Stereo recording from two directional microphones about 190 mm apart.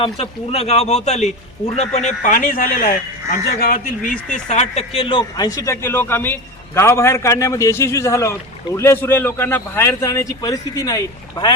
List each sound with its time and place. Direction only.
0.0 s speech: 30° left (ahead or behind)